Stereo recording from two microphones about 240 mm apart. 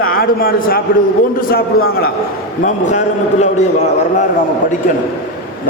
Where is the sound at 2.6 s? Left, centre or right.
Left.